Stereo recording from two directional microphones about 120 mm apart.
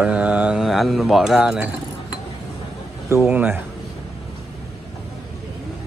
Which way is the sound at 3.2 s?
10° right (ahead or behind).